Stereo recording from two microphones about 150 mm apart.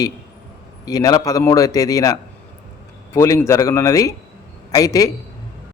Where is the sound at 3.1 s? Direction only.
20° left (ahead or behind).